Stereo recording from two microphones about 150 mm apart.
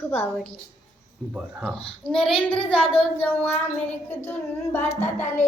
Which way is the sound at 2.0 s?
5° left (ahead or behind).